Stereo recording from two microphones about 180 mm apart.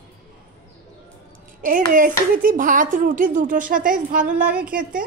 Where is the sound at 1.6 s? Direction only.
50° right (ahead or behind).